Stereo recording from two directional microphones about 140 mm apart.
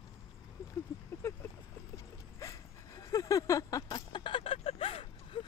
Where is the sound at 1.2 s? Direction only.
20° left (ahead or behind).